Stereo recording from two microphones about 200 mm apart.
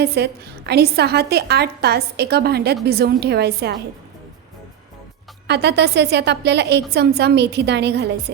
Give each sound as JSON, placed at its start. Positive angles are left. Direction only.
{"t": 0.0, "sound": "a woman's voice", "side_deg": -55}
{"t": 5.5, "sound": "a woman's voice", "side_deg": -55}